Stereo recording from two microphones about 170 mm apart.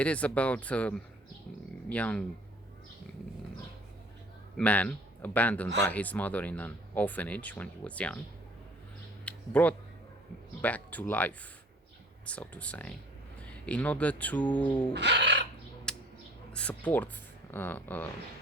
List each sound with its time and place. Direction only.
0.0 s speech: 10° left (ahead or behind)
4.5 s speech: 10° left (ahead or behind)
9.2 s a sound: 10° left (ahead or behind)
10.6 s speech: 10° left (ahead or behind)
14.7 s bird: 25° left (ahead or behind)
14.9 s speech: 90° right
15.9 s bird: 5° left (ahead or behind)
16.5 s speech: 5° left (ahead or behind)